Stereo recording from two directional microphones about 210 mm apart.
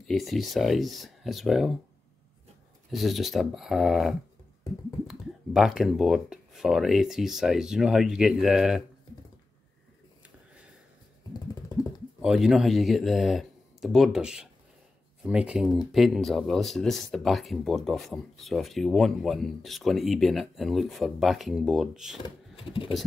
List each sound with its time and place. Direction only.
0.0 s speech: centre (ahead or behind)
2.9 s speech: centre (ahead or behind)
12.2 s speech: centre (ahead or behind)
22.6 s typing: 25° left (ahead or behind)